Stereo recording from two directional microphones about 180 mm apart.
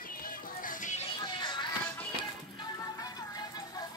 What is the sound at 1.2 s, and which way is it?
Music, 25° left (ahead or behind).